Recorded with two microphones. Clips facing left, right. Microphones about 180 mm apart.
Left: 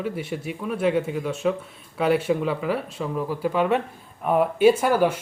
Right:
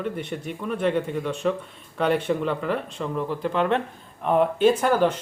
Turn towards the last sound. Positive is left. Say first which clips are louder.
# left 1 dB
turn(degrees=10)  # may be behind; listen again after turning